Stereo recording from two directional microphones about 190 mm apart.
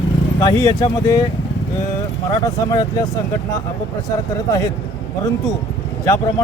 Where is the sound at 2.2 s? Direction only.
20° left (ahead or behind).